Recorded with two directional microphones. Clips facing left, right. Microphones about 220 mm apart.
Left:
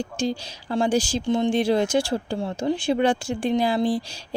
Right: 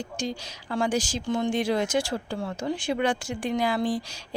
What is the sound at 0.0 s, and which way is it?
Speech, 30° left (ahead or behind).